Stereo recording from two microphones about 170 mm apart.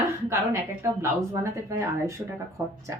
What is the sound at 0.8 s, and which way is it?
Speech, 15° right (ahead or behind).